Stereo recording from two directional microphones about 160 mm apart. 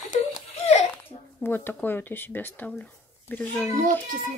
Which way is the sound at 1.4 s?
10° left (ahead or behind).